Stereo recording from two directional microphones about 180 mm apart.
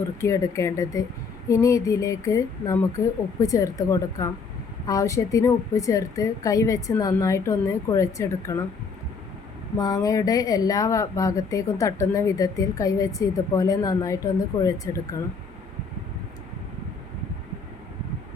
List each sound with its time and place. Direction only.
0.2 s a woman's voice: 15° left (ahead or behind)
9.7 s speech: 20° left (ahead or behind)